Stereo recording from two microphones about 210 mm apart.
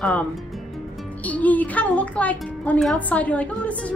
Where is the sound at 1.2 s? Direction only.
5° left (ahead or behind).